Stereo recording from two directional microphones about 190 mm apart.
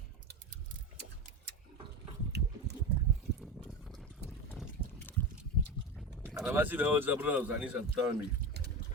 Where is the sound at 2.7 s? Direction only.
60° right (ahead or behind).